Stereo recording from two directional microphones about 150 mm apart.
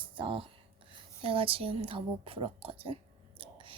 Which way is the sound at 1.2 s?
40° right (ahead or behind).